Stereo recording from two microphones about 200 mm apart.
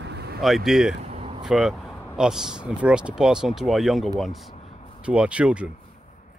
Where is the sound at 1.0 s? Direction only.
30° right (ahead or behind).